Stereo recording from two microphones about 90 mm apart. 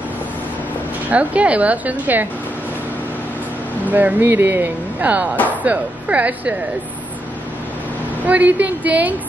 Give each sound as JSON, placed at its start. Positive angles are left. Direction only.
{"t": 1.1, "sound": "a woman's voice", "side_deg": -15}
{"t": 3.9, "sound": "speech", "side_deg": -20}
{"t": 5.3, "sound": "music", "side_deg": 20}
{"t": 5.6, "sound": "a woman's voice", "side_deg": -15}
{"t": 8.3, "sound": "a woman's voice", "side_deg": -15}